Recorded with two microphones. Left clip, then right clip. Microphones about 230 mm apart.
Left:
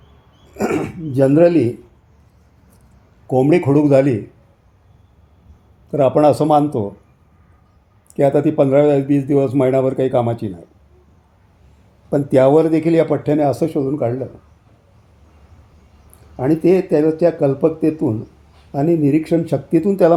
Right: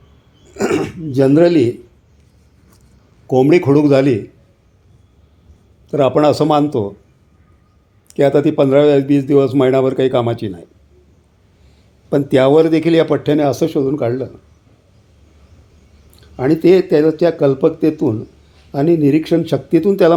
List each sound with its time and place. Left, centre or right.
0.5 s speech: centre
3.2 s a man's voice: centre
5.9 s a man's voice: centre
8.1 s a man's voice: centre
12.1 s a man's voice: centre
16.4 s a man's voice: centre